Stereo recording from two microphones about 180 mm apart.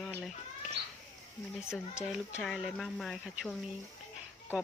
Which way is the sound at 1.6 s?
5° right (ahead or behind).